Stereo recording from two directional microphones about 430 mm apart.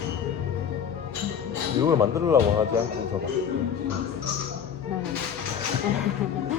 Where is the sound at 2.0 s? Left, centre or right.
Centre.